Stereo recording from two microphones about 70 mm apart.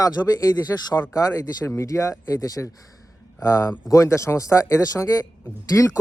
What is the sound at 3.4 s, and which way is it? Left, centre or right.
Speech, left.